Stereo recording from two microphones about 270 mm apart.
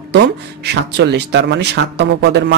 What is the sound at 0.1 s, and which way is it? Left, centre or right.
Speech, right.